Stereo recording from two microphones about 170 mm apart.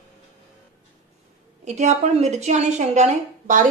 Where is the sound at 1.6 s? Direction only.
40° right (ahead or behind).